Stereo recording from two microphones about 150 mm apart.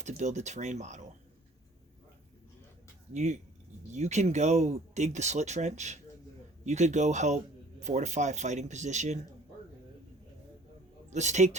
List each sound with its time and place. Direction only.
0.0 s speech: 50° right (ahead or behind)
3.1 s speech: 50° right (ahead or behind)
11.1 s speech: 50° right (ahead or behind)